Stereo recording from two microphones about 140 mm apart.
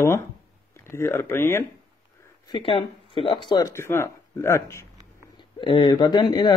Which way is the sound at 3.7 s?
20° left (ahead or behind).